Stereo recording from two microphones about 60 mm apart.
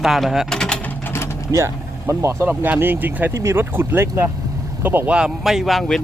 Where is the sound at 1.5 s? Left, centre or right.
Right.